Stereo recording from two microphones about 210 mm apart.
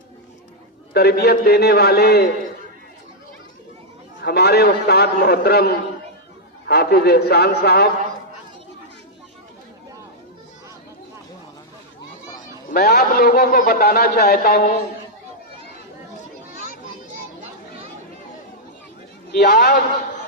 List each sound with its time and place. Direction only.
0.9 s a man's voice: 50° left (ahead or behind)
4.2 s a man's voice: 50° left (ahead or behind)
12.7 s a man's voice: 50° left (ahead or behind)
19.3 s a man's voice: 50° left (ahead or behind)